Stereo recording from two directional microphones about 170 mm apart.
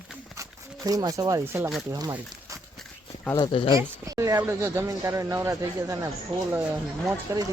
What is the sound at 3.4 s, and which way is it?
Speech, 30° left (ahead or behind).